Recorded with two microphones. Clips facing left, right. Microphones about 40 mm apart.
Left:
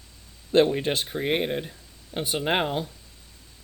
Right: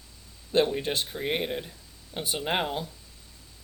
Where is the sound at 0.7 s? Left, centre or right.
Left.